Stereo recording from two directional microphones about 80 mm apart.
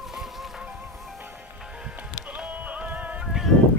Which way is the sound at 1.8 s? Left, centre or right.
Centre.